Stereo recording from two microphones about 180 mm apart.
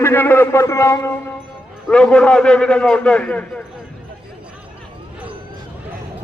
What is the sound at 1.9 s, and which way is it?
A man's voice, 5° left (ahead or behind).